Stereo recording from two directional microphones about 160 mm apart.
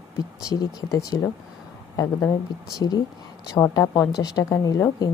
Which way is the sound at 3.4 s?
25° left (ahead or behind).